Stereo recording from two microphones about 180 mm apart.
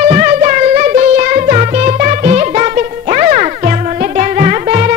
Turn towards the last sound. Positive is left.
turn(degrees=-45)  # may be behind; listen again after turning